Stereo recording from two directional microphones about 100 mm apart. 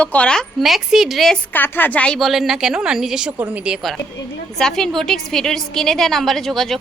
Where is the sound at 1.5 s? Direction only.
20° left (ahead or behind).